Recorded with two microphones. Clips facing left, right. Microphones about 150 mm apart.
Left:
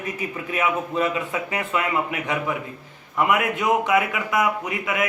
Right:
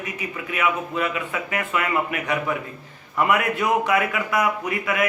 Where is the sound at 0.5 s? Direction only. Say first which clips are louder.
Left 1 dB; 25° left (ahead or behind).